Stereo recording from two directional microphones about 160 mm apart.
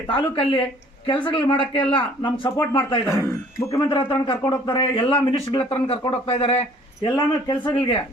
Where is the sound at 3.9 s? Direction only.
30° left (ahead or behind).